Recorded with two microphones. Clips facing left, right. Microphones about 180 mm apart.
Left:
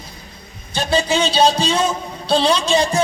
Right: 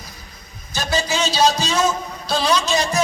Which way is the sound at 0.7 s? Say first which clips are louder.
Left 4 dB; 30° left (ahead or behind).